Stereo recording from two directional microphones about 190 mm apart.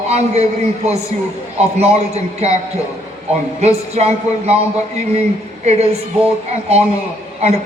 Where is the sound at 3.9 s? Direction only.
35° right (ahead or behind).